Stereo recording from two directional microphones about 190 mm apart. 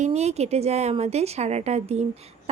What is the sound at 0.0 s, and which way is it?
A woman's voice, 35° right (ahead or behind).